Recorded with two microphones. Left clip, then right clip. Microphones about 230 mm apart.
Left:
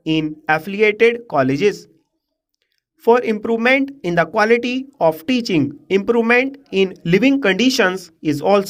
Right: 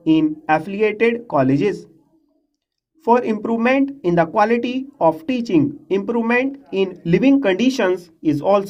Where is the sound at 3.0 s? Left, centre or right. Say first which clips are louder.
Left 2 dB; left.